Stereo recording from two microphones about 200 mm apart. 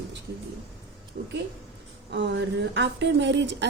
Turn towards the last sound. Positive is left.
turn(degrees=-60)  # may be behind; listen again after turning